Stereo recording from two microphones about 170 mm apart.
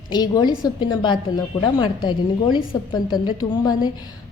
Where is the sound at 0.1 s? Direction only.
25° left (ahead or behind).